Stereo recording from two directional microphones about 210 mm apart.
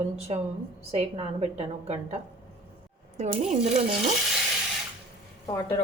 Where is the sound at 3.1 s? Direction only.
35° right (ahead or behind).